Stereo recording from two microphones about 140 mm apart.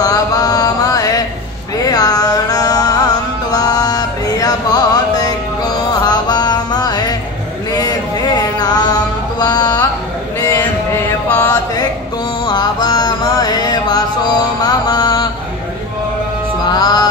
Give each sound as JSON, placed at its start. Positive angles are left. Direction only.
{"t": 0.0, "sound": "mantra", "side_deg": 25}
{"t": 1.8, "sound": "music", "side_deg": 25}
{"t": 7.7, "sound": "mantra", "side_deg": 30}
{"t": 9.4, "sound": "a sound", "side_deg": 30}
{"t": 10.4, "sound": "mantra", "side_deg": 20}
{"t": 12.4, "sound": "mantra", "side_deg": 30}
{"t": 16.6, "sound": "music", "side_deg": 30}